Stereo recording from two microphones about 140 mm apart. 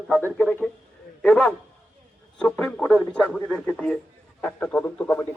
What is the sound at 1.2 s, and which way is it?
Speech, 5° left (ahead or behind).